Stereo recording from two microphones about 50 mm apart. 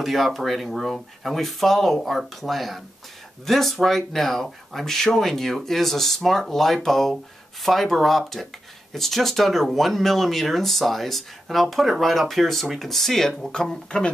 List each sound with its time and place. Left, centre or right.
0.0 s speech: centre